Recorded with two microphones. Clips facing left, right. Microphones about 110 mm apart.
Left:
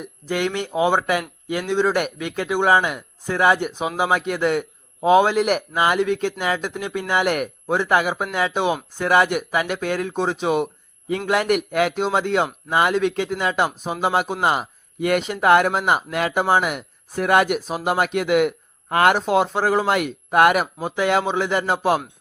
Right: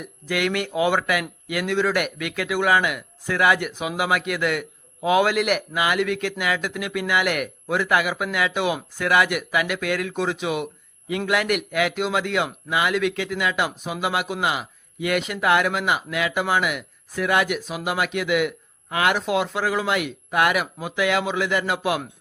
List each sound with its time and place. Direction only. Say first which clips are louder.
0.0 s a man's voice: left 1 dB; 30° left (ahead or behind)